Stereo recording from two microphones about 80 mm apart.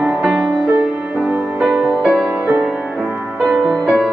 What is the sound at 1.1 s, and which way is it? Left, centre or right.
Music, centre.